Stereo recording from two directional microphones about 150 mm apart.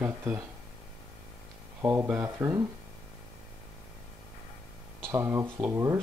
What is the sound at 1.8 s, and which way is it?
Speech, 15° right (ahead or behind).